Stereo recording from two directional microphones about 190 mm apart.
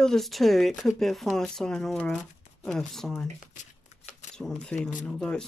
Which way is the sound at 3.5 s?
40° left (ahead or behind).